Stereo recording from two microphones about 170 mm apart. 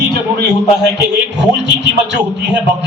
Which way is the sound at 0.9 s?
85° right.